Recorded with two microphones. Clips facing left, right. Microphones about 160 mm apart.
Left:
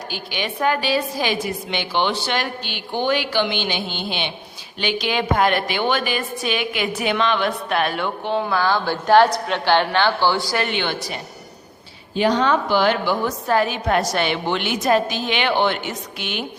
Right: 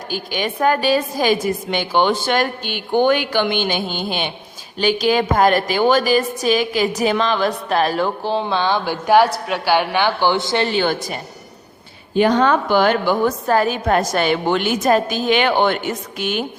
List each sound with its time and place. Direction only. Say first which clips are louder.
0.1 s a woman's voice: right 6 dB; 45° right (ahead or behind)